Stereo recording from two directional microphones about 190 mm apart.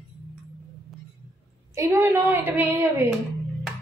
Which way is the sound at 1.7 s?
15° right (ahead or behind).